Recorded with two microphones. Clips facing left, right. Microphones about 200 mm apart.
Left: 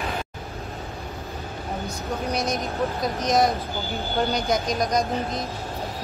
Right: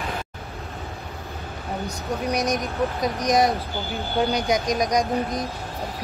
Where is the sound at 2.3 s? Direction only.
15° right (ahead or behind).